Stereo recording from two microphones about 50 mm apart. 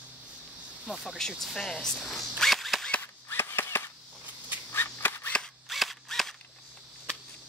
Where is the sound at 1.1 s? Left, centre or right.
Centre.